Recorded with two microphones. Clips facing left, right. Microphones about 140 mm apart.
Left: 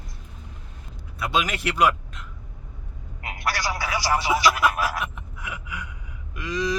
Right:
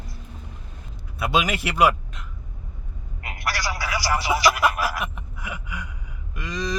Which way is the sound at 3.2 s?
20° left (ahead or behind).